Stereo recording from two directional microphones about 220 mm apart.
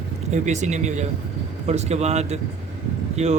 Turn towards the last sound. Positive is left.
turn(degrees=-30)  # may be behind; listen again after turning